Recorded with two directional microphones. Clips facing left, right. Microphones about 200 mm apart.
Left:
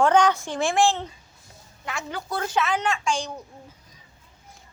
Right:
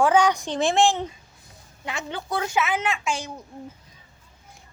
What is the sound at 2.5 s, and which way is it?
Speech, 10° right (ahead or behind).